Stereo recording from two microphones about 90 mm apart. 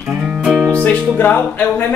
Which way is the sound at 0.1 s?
10° right (ahead or behind).